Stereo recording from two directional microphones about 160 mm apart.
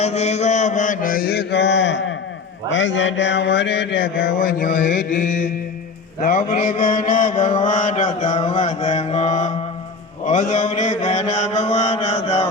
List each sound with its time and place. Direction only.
0.0 s mantra: 40° left (ahead or behind); by 2.0 s 90° left
3.2 s mantra: 90° left; by 5.5 s 50° left (ahead or behind)
6.5 s mantra: 35° left (ahead or behind)
7.1 s mantra: 55° left (ahead or behind); by 12.5 s 40° left (ahead or behind)